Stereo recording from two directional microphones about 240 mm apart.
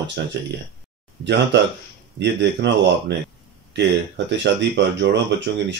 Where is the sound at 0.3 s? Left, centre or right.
Right.